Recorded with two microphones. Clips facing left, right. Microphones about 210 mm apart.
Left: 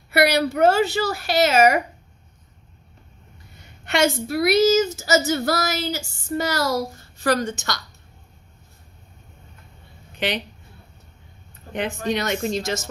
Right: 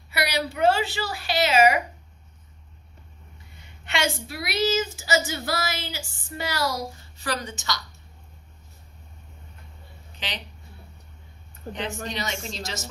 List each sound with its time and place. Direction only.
0.1 s speech: 55° left (ahead or behind)
3.8 s speech: 45° left (ahead or behind)
10.1 s speech: 55° left (ahead or behind)
11.7 s speech: 55° left (ahead or behind)